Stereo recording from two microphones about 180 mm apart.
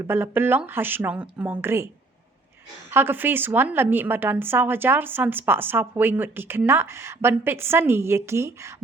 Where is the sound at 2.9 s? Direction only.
10° right (ahead or behind).